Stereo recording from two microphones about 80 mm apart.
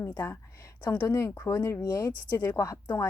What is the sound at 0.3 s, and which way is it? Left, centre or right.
Speech, left.